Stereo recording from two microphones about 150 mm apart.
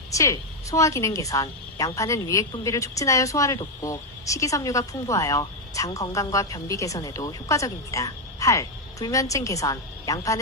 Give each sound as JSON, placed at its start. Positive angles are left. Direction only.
{"t": 0.1, "sound": "speech", "side_deg": 20}